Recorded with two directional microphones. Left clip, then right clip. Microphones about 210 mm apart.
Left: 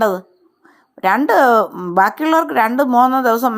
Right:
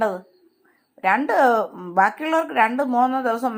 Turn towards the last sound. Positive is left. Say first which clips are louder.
# left 7 dB
turn(degrees=45)  # may be behind; listen again after turning